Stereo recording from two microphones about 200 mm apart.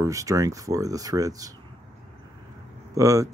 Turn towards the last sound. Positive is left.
turn(degrees=-15)  # may be behind; listen again after turning